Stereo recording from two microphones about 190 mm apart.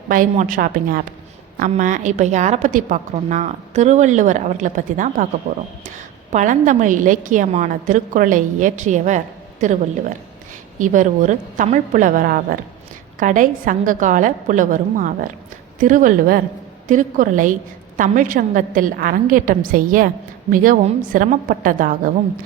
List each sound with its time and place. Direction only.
0.1 s a woman's voice: 45° right (ahead or behind)
6.3 s a woman's voice: 40° right (ahead or behind)